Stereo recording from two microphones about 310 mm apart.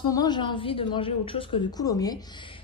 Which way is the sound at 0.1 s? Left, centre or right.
Centre.